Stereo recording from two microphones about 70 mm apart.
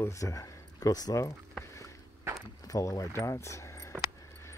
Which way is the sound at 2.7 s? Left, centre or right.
Left.